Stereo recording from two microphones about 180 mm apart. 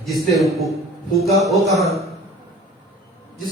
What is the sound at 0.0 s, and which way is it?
A man's voice, centre (ahead or behind).